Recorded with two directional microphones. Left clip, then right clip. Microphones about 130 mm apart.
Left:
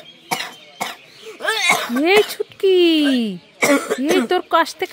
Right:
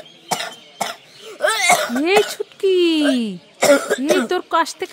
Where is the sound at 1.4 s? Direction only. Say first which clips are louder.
Right 2 dB; 55° right (ahead or behind).